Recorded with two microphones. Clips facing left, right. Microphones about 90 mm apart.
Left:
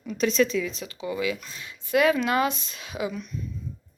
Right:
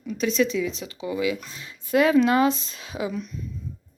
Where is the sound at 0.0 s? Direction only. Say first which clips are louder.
Even; 5° right (ahead or behind).